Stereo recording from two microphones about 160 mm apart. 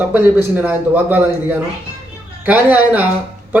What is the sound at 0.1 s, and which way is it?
A man's voice, 10° right (ahead or behind).